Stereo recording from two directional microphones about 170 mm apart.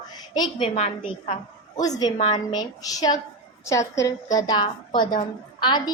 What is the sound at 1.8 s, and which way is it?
A woman's voice, 20° left (ahead or behind).